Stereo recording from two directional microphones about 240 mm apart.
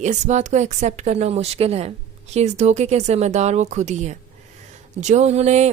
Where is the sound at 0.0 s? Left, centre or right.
Right.